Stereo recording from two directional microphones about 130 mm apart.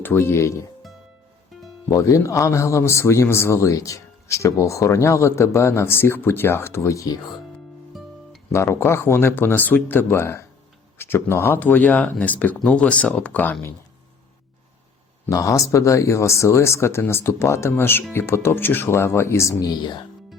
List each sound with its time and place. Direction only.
0.0 s speech: 20° left (ahead or behind)
1.9 s speech: 25° left (ahead or behind)
7.9 s music: centre (ahead or behind)
8.5 s speech: 20° left (ahead or behind)
15.3 s speech: 25° left (ahead or behind)